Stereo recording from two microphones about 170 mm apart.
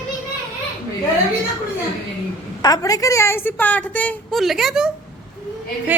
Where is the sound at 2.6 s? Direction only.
20° left (ahead or behind); by 4.9 s 5° right (ahead or behind).